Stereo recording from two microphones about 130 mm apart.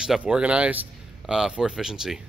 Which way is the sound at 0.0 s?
5° right (ahead or behind).